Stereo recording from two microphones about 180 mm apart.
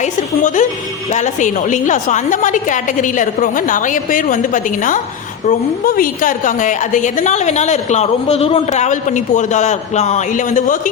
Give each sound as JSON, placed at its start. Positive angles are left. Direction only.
{"t": 0.0, "sound": "a woman's voice", "side_deg": 45}